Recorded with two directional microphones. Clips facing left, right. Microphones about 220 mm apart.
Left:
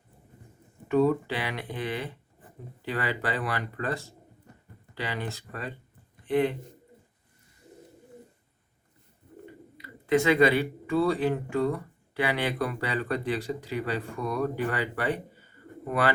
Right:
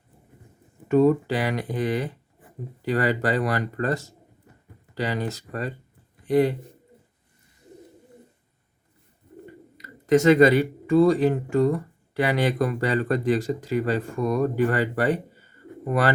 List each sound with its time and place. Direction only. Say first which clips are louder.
0.9 s speech: right 5 dB; 45° right (ahead or behind)
9.7 s speech: right 5 dB; 45° right (ahead or behind)